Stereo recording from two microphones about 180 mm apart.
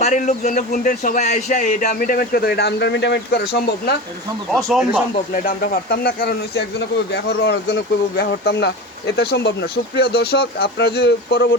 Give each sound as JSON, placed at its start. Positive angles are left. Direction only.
{"t": 0.0, "sound": "a man's voice", "side_deg": 45}
{"t": 4.5, "sound": "speech", "side_deg": 0}
{"t": 5.3, "sound": "speech", "side_deg": 50}